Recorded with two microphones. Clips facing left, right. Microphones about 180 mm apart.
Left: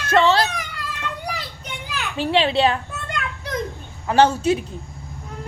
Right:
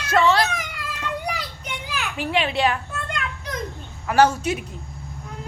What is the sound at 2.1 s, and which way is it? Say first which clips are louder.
Speech: left 5 dB; 30° left (ahead or behind).